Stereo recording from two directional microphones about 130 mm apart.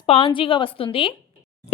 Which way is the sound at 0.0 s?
45° left (ahead or behind).